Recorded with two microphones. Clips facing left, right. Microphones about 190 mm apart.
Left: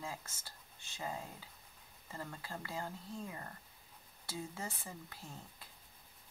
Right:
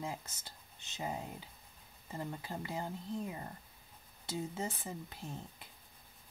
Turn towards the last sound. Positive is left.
turn(degrees=-20)  # may be behind; listen again after turning